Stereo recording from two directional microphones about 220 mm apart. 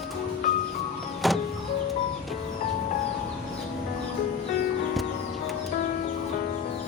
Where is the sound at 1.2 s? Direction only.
Centre (ahead or behind).